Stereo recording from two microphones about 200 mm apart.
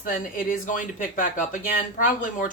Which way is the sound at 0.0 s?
45° left (ahead or behind).